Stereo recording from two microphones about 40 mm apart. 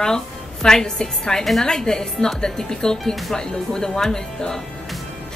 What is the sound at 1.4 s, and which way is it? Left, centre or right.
A woman's voice, centre.